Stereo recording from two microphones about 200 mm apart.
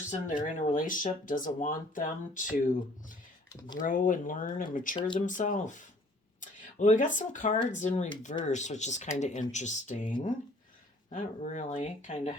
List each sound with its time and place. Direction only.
0.3 s speech: 40° left (ahead or behind)
4.9 s speech: 25° left (ahead or behind)
5.2 s speech: 40° left (ahead or behind)
11.1 s speech: 40° left (ahead or behind)